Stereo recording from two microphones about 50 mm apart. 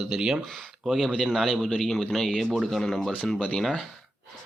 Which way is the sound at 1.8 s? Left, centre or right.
Centre.